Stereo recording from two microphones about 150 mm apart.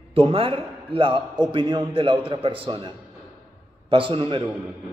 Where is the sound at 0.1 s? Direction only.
40° right (ahead or behind).